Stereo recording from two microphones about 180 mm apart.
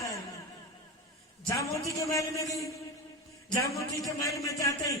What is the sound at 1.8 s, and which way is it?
Speech, 15° left (ahead or behind).